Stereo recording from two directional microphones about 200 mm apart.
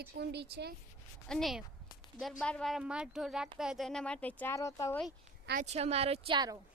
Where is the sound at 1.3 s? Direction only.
Centre (ahead or behind).